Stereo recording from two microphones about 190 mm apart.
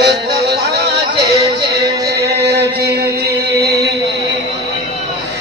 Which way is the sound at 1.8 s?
55° right (ahead or behind).